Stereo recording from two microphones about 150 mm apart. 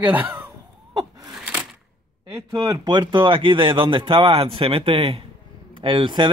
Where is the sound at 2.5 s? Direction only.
30° right (ahead or behind).